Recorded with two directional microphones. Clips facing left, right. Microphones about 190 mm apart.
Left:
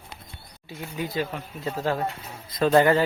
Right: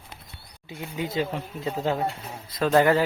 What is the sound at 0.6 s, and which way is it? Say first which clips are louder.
Speech: right 1 dB; 20° right (ahead or behind).